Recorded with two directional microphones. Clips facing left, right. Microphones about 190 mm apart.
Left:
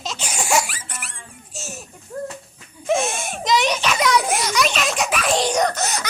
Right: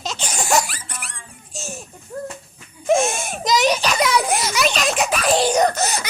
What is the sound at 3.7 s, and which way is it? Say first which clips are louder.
Speech: right 2 dB; 35° right (ahead or behind).